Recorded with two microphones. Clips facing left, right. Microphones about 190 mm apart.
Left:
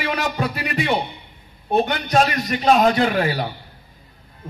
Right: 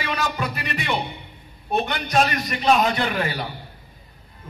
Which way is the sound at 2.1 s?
40° left (ahead or behind).